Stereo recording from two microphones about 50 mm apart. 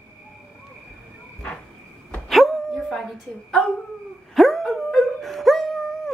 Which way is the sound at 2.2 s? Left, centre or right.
Centre.